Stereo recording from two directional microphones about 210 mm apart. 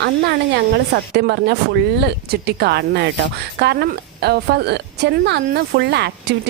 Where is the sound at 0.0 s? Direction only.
55° right (ahead or behind).